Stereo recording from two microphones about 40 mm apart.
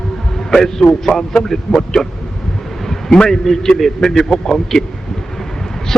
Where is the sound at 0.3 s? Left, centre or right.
Centre.